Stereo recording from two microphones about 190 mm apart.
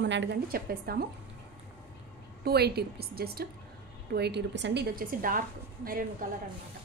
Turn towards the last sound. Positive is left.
turn(degrees=-45)  # may be behind; listen again after turning